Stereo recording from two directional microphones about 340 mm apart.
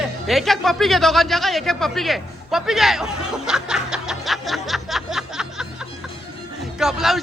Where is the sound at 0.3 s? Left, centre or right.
Centre.